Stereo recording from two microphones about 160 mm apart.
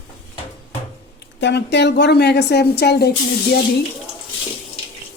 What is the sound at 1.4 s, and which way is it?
A woman's voice, 90° left.